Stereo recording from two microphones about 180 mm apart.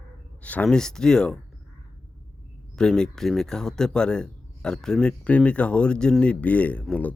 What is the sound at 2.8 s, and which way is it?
Speech, 5° left (ahead or behind).